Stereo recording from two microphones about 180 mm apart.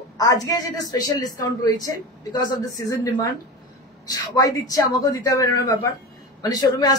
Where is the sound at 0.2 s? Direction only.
20° left (ahead or behind).